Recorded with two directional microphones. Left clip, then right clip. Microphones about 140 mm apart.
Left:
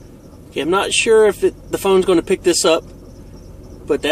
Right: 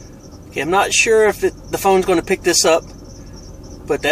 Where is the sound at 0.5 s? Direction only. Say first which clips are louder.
Right 2 dB; 25° left (ahead or behind).